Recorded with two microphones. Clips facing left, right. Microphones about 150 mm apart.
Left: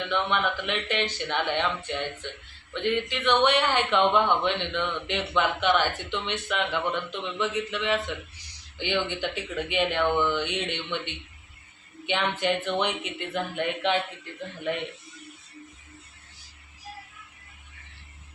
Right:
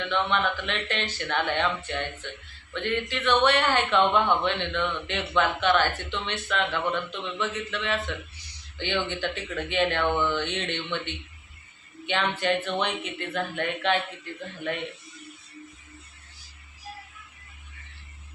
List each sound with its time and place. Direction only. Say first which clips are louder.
0.1 s speech: right 1 dB; 10° left (ahead or behind)